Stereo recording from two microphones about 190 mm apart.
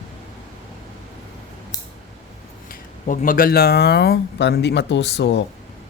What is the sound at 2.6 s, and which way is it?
Speech, 45° left (ahead or behind).